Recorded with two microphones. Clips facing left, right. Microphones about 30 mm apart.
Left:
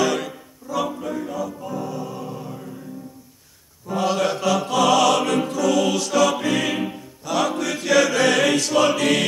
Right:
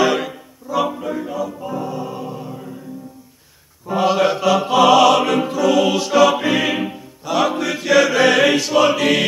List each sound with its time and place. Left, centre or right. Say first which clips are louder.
0.0 s music: right 4 dB; centre
3.8 s music: right 5 dB; right